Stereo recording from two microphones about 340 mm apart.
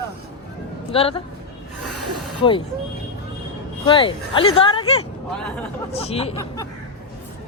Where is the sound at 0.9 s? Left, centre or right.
Centre.